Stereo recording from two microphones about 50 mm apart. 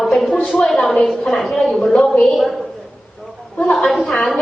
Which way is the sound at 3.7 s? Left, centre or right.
Centre.